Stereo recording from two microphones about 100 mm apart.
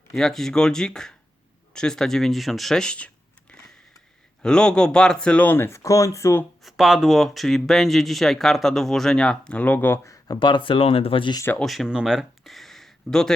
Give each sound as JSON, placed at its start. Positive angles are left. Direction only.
{"t": 0.1, "sound": "speech", "side_deg": 5}
{"t": 4.4, "sound": "speech", "side_deg": 10}
{"t": 6.7, "sound": "speech", "side_deg": -5}
{"t": 10.4, "sound": "speech", "side_deg": 55}
{"t": 11.6, "sound": "speech", "side_deg": 0}